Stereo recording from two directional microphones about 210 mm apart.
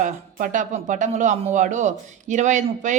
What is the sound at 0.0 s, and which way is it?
A woman's voice, 40° right (ahead or behind).